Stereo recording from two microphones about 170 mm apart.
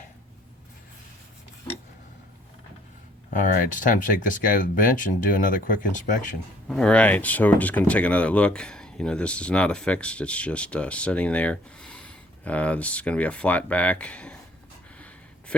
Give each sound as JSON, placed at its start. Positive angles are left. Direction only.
{"t": 3.3, "sound": "speech", "side_deg": 50}
{"t": 6.7, "sound": "speech", "side_deg": 5}
{"t": 14.9, "sound": "a sound", "side_deg": 10}